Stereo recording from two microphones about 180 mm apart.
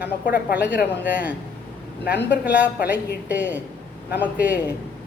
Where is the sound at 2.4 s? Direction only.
10° right (ahead or behind).